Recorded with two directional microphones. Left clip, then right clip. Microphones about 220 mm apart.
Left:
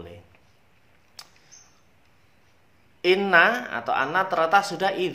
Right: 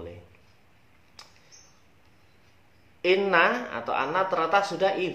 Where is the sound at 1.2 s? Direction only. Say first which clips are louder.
Left 4 dB; 50° left (ahead or behind).